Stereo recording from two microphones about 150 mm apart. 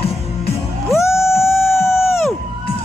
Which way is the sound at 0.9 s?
20° left (ahead or behind).